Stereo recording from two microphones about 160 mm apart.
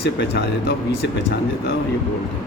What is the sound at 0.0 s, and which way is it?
Speech, 90° left.